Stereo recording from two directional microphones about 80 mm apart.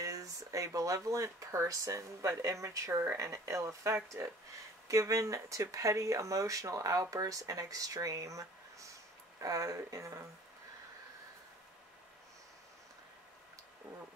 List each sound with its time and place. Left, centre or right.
0.0 s speech: right